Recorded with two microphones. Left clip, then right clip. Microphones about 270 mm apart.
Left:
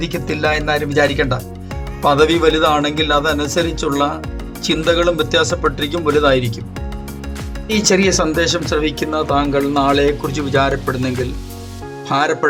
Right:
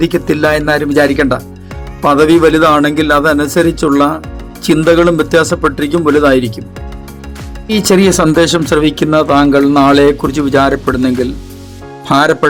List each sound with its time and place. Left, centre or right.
0.0 s speech: right
7.7 s speech: right